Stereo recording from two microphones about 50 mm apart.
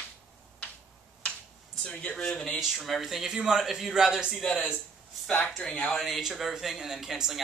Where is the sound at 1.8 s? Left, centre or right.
Centre.